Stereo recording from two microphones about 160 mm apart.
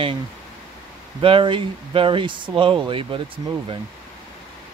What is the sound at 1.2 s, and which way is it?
Speech, 35° right (ahead or behind).